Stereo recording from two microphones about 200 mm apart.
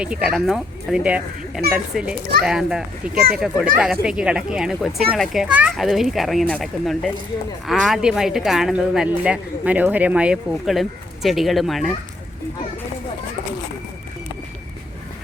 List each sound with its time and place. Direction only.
0.0 s speech: 5° right (ahead or behind)